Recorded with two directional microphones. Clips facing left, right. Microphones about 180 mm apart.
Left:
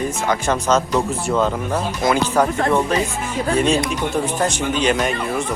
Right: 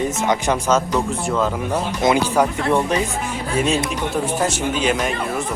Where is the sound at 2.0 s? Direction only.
15° right (ahead or behind).